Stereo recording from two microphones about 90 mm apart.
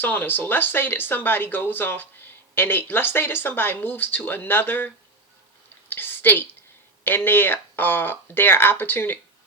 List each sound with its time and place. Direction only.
0.0 s speech: 20° left (ahead or behind)
5.9 s a sound: 25° left (ahead or behind)
7.3 s speech: 25° left (ahead or behind)